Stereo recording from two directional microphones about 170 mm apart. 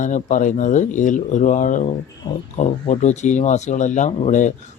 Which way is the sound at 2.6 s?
45° left (ahead or behind).